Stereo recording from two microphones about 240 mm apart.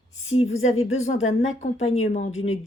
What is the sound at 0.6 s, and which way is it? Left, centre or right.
Speech, left.